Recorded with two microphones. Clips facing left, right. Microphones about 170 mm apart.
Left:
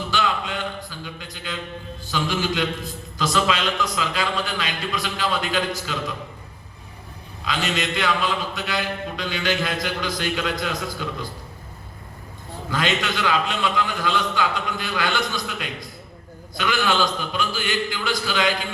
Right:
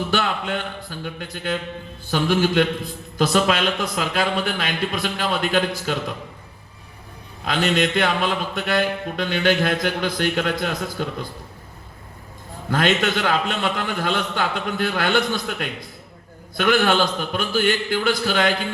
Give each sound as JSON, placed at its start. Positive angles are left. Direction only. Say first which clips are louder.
{"t": 0.1, "sound": "a sound", "louder": "right 2 dB", "side_deg": -55}
{"t": 2.0, "sound": "a man's voice", "louder": "right 5 dB", "side_deg": -55}
{"t": 7.4, "sound": "a man's voice", "louder": "right 5 dB", "side_deg": -55}
{"t": 12.7, "sound": "a man's voice", "louder": "right 4 dB", "side_deg": -55}